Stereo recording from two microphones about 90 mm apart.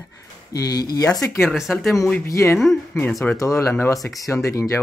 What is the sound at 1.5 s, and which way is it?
Speech, centre (ahead or behind).